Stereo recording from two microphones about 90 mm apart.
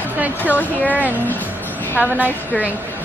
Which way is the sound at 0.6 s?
15° left (ahead or behind).